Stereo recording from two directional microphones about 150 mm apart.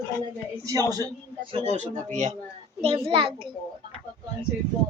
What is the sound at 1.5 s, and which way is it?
Speech, 50° right (ahead or behind).